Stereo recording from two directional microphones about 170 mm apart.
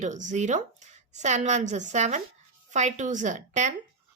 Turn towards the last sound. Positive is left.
turn(degrees=-45)  # may be behind; listen again after turning